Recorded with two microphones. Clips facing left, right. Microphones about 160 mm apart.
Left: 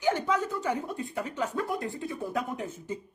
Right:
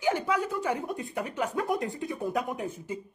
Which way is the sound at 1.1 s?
15° right (ahead or behind).